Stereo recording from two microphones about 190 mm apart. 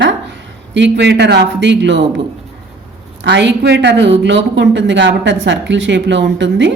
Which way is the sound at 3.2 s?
70° right (ahead or behind).